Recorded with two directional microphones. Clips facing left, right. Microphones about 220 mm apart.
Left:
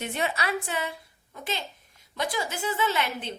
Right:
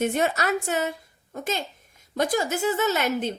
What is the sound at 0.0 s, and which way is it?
A woman's voice, 45° right (ahead or behind).